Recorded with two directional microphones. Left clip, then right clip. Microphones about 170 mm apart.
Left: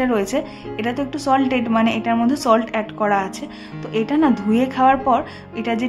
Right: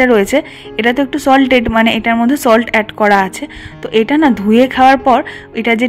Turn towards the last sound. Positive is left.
turn(degrees=-30)  # may be behind; listen again after turning